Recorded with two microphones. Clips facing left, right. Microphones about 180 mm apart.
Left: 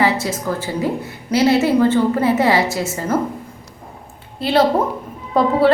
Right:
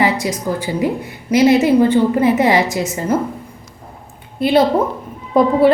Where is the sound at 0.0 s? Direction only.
15° right (ahead or behind).